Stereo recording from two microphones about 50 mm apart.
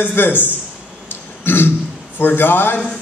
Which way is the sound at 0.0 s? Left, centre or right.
Left.